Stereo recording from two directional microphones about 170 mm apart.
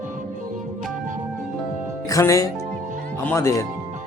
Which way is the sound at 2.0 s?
20° left (ahead or behind).